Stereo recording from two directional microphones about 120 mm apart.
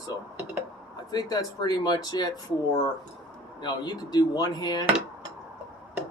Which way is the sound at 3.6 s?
35° left (ahead or behind).